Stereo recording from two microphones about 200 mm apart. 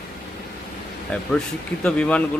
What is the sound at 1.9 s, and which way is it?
Speech, 5° left (ahead or behind).